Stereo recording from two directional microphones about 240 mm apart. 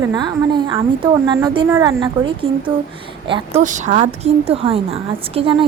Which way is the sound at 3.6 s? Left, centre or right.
Right.